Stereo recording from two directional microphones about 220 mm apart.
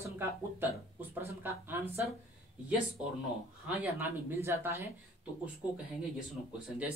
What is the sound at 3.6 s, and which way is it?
Speech, 10° right (ahead or behind).